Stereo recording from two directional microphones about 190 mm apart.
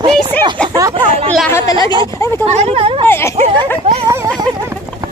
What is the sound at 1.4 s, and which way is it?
Speech, 15° left (ahead or behind).